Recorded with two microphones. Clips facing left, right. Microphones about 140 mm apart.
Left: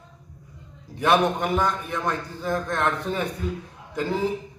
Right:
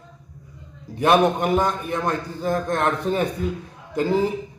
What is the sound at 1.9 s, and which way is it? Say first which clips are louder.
Speech: right 3 dB; 35° right (ahead or behind).